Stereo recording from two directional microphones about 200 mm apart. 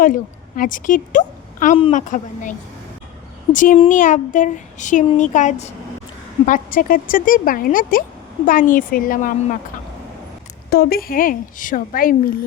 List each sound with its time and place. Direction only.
0.0 s a woman's voice: 45° left (ahead or behind)
10.7 s a woman's voice: 50° left (ahead or behind)